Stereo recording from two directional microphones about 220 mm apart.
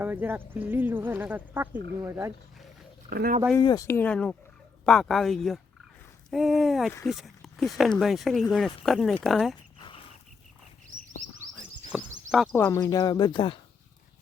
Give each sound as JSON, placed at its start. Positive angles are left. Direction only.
{"t": 0.0, "sound": "speech", "side_deg": -10}
{"t": 3.1, "sound": "speech", "side_deg": -40}
{"t": 3.6, "sound": "speech", "side_deg": 20}
{"t": 11.5, "sound": "a sound", "side_deg": 5}
{"t": 12.5, "sound": "speech", "side_deg": 10}